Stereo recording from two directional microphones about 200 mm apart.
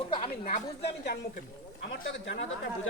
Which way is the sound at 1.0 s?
55° left (ahead or behind).